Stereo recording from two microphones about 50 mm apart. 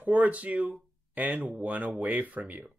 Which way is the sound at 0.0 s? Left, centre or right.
Right.